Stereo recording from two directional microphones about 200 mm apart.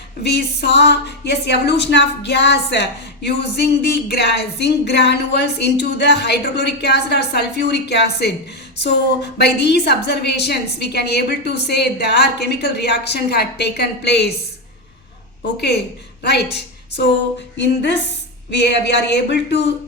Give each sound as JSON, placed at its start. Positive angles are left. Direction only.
{"t": 0.2, "sound": "a woman's voice", "side_deg": 55}
{"t": 15.5, "sound": "a woman's voice", "side_deg": 55}